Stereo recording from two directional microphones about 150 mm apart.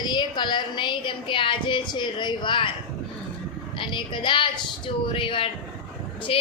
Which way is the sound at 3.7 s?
35° left (ahead or behind).